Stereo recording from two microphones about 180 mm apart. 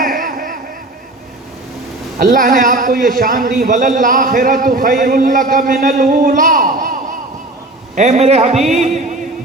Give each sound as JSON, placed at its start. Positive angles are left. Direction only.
{"t": 0.0, "sound": "a sound", "side_deg": -50}
{"t": 2.1, "sound": "a man's voice", "side_deg": -50}
{"t": 7.9, "sound": "a man's voice", "side_deg": -40}
{"t": 8.7, "sound": "music", "side_deg": -40}